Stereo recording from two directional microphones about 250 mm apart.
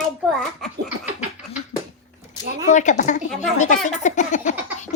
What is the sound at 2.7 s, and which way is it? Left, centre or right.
Speech, left.